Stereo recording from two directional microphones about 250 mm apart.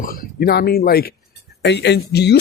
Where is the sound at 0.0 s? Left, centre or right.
Left.